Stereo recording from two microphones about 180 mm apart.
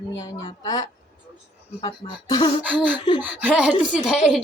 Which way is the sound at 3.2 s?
10° right (ahead or behind).